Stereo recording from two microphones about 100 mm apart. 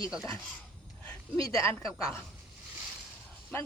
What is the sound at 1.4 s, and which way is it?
Speech, 30° left (ahead or behind).